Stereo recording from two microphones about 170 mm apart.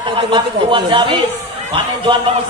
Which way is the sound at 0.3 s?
30° right (ahead or behind).